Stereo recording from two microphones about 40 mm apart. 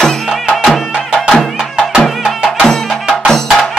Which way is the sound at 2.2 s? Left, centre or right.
Centre.